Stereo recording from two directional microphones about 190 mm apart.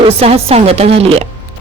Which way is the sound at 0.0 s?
30° right (ahead or behind).